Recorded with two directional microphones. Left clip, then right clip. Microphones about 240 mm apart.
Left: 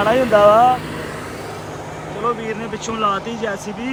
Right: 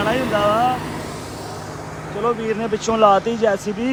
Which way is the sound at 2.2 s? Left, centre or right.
Centre.